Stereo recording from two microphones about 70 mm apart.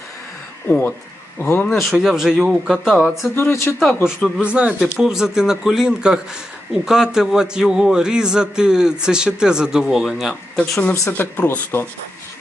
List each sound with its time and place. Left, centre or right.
0.7 s speech: left
1.8 s speech: centre
3.3 s speech: left
3.8 s speech: centre
4.4 s a man's voice: centre
11.1 s speech: left